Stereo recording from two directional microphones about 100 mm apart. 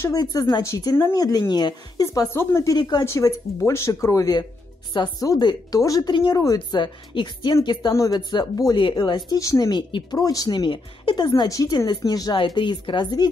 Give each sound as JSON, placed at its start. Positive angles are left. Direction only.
{"t": 0.1, "sound": "a woman's voice", "side_deg": 40}
{"t": 2.3, "sound": "speech", "side_deg": 30}
{"t": 2.8, "sound": "a woman's voice", "side_deg": 45}
{"t": 3.1, "sound": "speech", "side_deg": 30}
{"t": 4.9, "sound": "a woman's voice", "side_deg": 50}
{"t": 6.8, "sound": "a woman's voice", "side_deg": 55}
{"t": 7.9, "sound": "speech", "side_deg": 30}
{"t": 8.7, "sound": "a woman's voice", "side_deg": 55}
{"t": 9.4, "sound": "speech", "side_deg": 35}
{"t": 9.7, "sound": "speech", "side_deg": 55}
{"t": 10.1, "sound": "a woman's voice", "side_deg": 40}
{"t": 12.4, "sound": "a woman's voice", "side_deg": 55}